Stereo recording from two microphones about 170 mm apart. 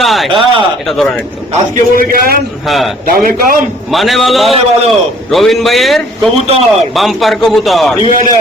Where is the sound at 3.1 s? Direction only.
55° right (ahead or behind).